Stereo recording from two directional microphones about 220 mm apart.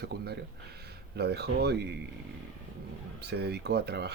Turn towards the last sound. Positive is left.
turn(degrees=-50)  # may be behind; listen again after turning